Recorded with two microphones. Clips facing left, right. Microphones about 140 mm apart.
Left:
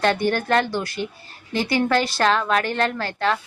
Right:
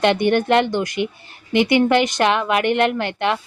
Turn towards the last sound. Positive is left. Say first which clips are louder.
# right 2 dB
turn(degrees=-20)  # may be behind; listen again after turning